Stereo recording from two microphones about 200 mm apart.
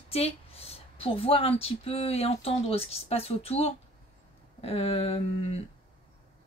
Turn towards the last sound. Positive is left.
turn(degrees=30)  # may be behind; listen again after turning